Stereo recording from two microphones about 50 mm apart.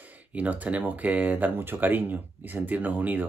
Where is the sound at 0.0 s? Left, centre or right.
Right.